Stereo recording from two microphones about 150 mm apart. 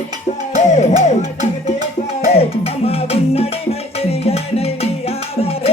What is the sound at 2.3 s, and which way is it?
Music, 40° left (ahead or behind).